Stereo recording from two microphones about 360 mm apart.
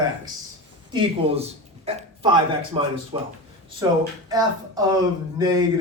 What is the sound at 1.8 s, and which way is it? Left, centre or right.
Speech, centre.